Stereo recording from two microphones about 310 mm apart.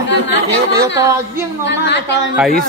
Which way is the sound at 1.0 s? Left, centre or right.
Centre.